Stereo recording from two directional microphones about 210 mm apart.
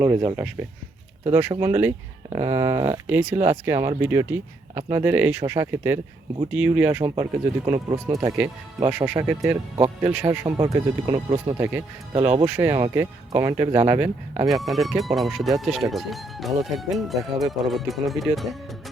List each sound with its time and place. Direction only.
0.3 s speech: 5° right (ahead or behind)
9.7 s speech: 20° right (ahead or behind)
12.1 s speech: 25° right (ahead or behind)
12.5 s speech: 15° right (ahead or behind)